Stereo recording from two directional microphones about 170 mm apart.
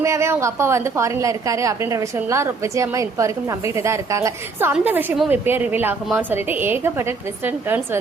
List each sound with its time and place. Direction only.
0.0 s a woman's voice: 15° right (ahead or behind)